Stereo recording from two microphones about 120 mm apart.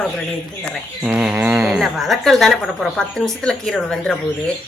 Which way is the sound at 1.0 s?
5° right (ahead or behind).